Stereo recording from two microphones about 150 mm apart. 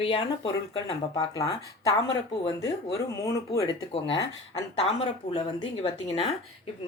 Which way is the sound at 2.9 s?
20° left (ahead or behind).